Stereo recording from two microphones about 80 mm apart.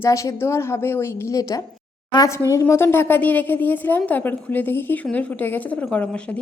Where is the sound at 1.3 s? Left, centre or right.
Left.